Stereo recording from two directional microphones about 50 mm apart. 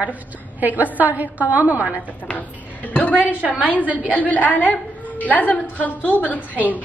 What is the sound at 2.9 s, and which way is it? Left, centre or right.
Speech, left.